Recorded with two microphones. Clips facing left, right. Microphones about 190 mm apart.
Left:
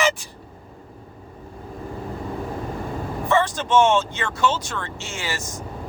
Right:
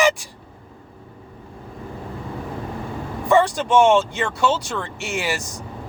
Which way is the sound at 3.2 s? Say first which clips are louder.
Right 4 dB; 15° right (ahead or behind).